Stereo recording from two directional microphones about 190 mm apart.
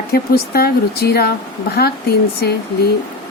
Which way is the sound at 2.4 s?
60° left (ahead or behind).